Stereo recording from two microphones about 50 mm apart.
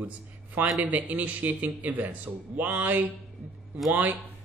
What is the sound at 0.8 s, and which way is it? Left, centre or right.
A man's voice, right.